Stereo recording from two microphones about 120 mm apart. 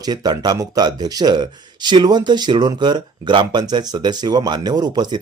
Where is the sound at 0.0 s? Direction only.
35° right (ahead or behind).